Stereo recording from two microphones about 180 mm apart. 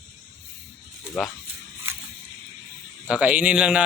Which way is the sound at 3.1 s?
5° right (ahead or behind).